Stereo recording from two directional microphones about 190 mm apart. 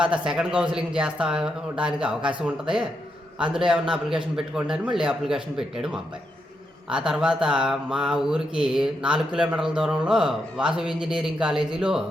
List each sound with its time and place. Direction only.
0.0 s mantra: 5° right (ahead or behind)